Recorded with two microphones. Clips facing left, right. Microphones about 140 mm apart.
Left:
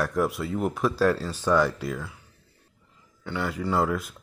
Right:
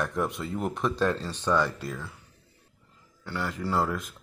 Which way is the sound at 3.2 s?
Centre (ahead or behind).